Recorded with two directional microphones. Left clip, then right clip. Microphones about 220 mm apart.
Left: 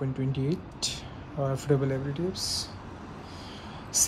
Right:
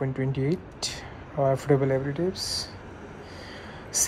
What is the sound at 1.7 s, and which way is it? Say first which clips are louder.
Speech: right 1 dB; 40° right (ahead or behind).